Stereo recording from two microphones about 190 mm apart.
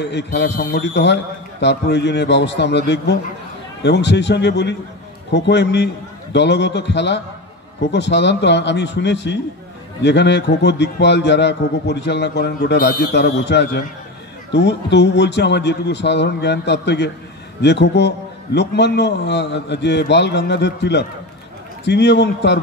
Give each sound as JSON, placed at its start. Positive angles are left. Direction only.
{"t": 0.0, "sound": "a man's voice", "side_deg": 65}